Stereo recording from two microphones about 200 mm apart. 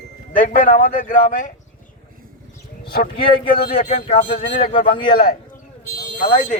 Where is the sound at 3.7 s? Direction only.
30° left (ahead or behind).